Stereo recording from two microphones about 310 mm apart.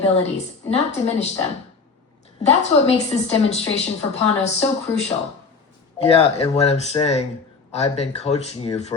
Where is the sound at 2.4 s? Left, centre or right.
Centre.